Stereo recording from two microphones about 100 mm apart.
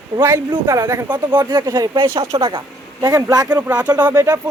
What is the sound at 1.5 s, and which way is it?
Speech, 45° right (ahead or behind).